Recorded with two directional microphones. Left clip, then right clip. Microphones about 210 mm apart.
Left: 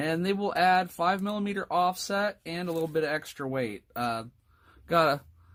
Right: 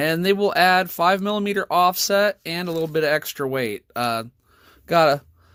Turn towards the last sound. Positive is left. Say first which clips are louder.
# right 7 dB
turn(degrees=-25)  # may be behind; listen again after turning